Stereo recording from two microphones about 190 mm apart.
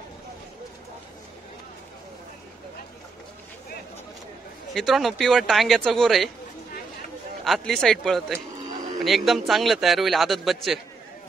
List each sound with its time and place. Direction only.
4.7 s a man's voice: centre (ahead or behind)
7.4 s a man's voice: centre (ahead or behind)